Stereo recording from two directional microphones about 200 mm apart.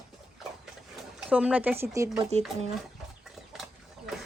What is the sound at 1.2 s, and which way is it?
Speech, 5° right (ahead or behind).